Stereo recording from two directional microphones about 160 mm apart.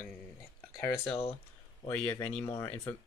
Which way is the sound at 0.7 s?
15° left (ahead or behind).